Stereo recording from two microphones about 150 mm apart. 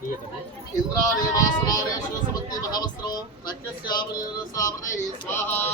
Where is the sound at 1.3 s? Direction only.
25° left (ahead or behind).